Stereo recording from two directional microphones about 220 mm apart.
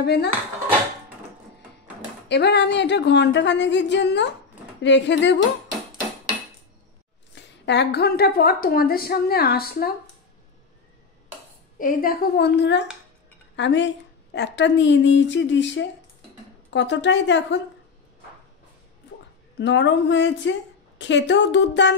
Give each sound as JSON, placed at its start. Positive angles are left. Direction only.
{"t": 0.0, "sound": "a woman's voice", "side_deg": 50}
{"t": 2.2, "sound": "a woman's voice", "side_deg": 50}
{"t": 7.3, "sound": "a woman's voice", "side_deg": 50}
{"t": 11.8, "sound": "a woman's voice", "side_deg": 40}
{"t": 19.6, "sound": "a woman's voice", "side_deg": 55}